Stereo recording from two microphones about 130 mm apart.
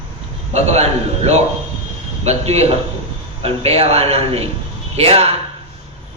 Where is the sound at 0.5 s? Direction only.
55° right (ahead or behind).